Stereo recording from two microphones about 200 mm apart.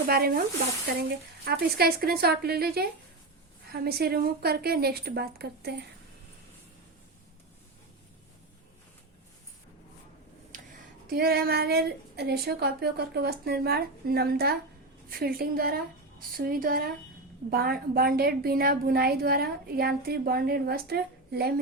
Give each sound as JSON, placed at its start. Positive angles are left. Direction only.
{"t": 0.1, "sound": "a woman's voice", "side_deg": -50}
{"t": 10.5, "sound": "a sound", "side_deg": -40}
{"t": 11.1, "sound": "a woman's voice", "side_deg": -50}